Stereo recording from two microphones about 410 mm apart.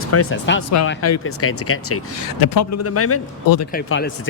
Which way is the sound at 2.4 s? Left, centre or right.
Left.